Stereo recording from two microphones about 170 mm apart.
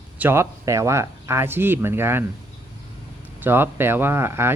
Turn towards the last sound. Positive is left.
turn(degrees=-15)  # may be behind; listen again after turning